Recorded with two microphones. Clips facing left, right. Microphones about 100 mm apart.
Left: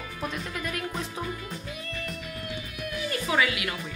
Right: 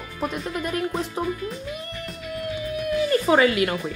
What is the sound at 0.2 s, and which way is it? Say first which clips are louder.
A woman's voice: right 6 dB; 30° right (ahead or behind).